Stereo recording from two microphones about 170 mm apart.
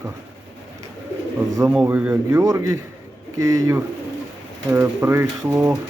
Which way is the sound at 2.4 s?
20° right (ahead or behind).